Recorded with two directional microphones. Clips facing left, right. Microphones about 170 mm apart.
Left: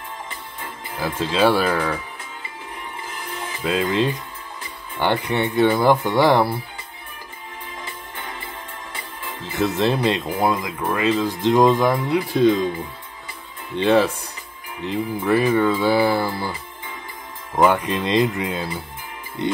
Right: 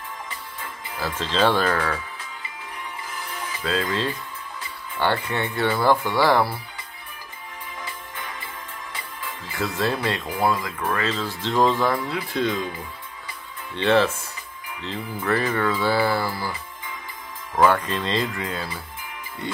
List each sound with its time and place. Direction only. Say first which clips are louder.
0.9 s speech: left 3 dB; 10° left (ahead or behind)
3.8 s speech: left 5 dB; 20° left (ahead or behind)
9.2 s speech: left 6 dB; 20° left (ahead or behind)
13.7 s speech: left 3 dB; 15° left (ahead or behind)
17.6 s speech: left 2 dB; 15° left (ahead or behind)